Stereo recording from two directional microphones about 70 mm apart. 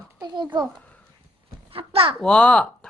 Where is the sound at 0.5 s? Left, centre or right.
Right.